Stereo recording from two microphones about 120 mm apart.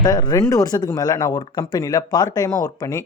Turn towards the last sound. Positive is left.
turn(degrees=30)  # may be behind; listen again after turning